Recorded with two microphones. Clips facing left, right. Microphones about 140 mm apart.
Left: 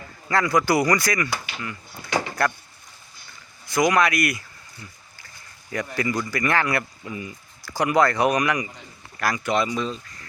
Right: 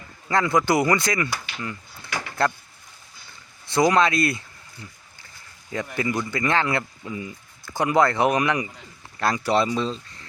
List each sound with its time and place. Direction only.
0.3 s speech: 20° right (ahead or behind)
2.0 s a sound: 25° left (ahead or behind)
3.7 s speech: 30° right (ahead or behind)
5.8 s a man's voice: 20° right (ahead or behind)